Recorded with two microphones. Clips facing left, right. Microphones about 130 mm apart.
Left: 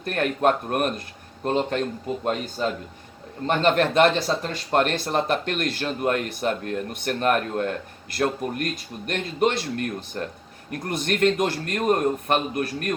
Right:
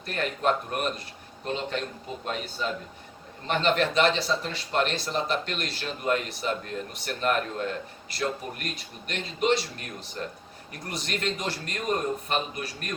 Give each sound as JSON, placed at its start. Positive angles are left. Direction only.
{"t": 0.0, "sound": "speech", "side_deg": 55}